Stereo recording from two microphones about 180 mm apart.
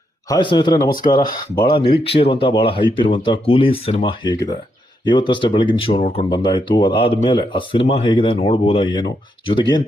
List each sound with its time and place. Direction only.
0.3 s speech: 25° left (ahead or behind)